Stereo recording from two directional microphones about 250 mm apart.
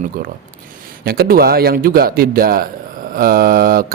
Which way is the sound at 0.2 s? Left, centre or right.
Right.